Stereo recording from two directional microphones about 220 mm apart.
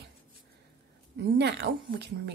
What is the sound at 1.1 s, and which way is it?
A woman's voice, 50° right (ahead or behind).